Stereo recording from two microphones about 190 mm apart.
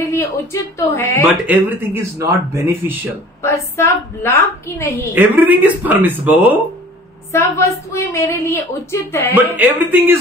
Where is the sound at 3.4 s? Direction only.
15° left (ahead or behind).